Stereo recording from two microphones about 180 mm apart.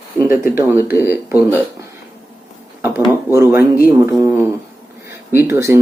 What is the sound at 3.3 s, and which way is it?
Speech, 15° right (ahead or behind).